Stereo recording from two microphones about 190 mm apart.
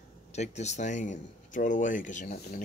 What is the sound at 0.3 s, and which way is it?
Speech, 35° left (ahead or behind).